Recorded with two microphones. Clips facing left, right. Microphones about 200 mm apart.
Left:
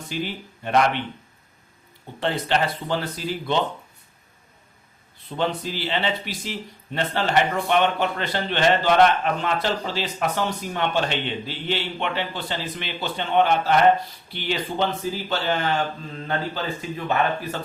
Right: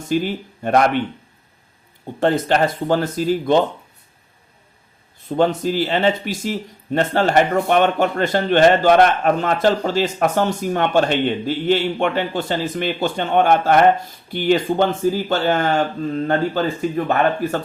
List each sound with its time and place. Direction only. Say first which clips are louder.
0.1 s speech: right 10 dB; 45° right (ahead or behind)
2.2 s speech: right 7 dB; 45° right (ahead or behind)
5.3 s speech: right 8 dB; 45° right (ahead or behind)